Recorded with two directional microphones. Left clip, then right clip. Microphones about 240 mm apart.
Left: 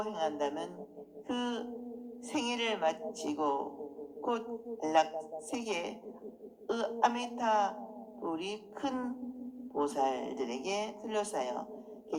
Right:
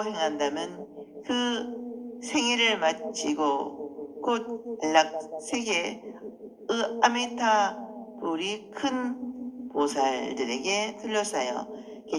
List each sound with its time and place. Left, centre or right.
0.0 s a woman's voice: right
4.8 s a woman's voice: right